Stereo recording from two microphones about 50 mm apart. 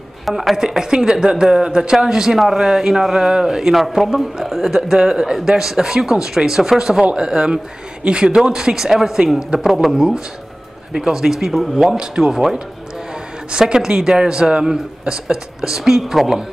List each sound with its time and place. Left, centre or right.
0.2 s a woman's voice: centre
0.6 s a man's voice: centre
4.9 s a man's voice: centre